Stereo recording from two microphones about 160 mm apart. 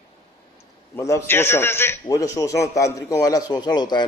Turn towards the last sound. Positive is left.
turn(degrees=25)  # may be behind; listen again after turning